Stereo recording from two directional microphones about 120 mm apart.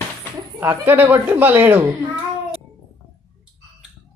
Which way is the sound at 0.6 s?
15° right (ahead or behind).